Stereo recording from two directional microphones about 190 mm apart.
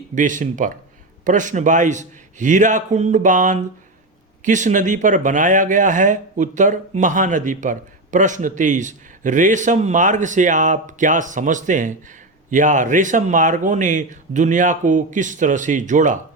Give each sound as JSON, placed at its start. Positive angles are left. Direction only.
{"t": 0.1, "sound": "speech", "side_deg": -40}